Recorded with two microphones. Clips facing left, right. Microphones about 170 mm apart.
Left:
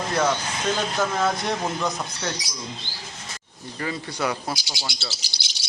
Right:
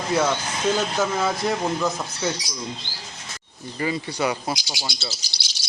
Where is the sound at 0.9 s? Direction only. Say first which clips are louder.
Even; 5° right (ahead or behind).